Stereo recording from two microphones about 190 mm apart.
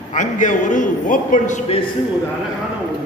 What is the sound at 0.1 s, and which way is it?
A man's voice, 40° left (ahead or behind).